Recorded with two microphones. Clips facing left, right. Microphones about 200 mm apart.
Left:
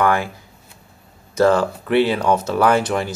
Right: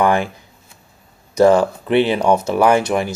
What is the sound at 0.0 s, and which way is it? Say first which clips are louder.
Speech: right 2 dB; 20° right (ahead or behind).